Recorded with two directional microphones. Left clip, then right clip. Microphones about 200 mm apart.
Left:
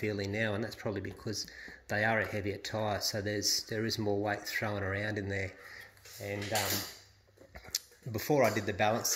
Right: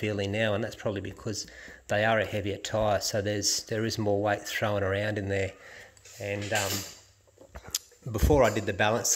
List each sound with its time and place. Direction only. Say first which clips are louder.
0.0 s speech: right 5 dB; 25° right (ahead or behind)